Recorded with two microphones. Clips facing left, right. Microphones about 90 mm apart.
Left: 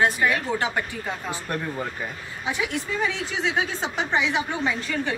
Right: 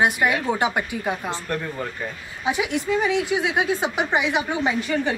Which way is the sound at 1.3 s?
15° left (ahead or behind).